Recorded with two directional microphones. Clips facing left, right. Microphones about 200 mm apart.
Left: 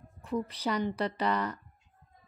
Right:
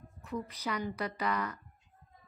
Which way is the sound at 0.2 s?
30° left (ahead or behind).